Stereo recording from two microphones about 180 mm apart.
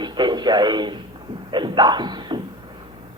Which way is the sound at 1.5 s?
25° right (ahead or behind).